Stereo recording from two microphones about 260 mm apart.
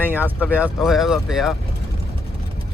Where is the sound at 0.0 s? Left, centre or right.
Centre.